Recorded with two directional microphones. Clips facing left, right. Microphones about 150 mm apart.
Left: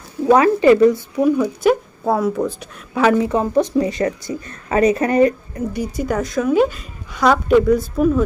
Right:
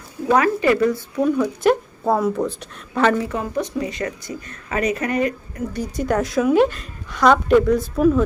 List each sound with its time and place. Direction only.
0.3 s speech: 25° left (ahead or behind)
1.1 s a woman's voice: 5° left (ahead or behind)
3.2 s speech: 20° left (ahead or behind)
3.5 s speech: 35° left (ahead or behind)
5.7 s a woman's voice: 5° left (ahead or behind)